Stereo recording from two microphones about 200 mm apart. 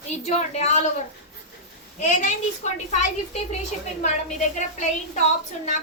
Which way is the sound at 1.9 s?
35° left (ahead or behind).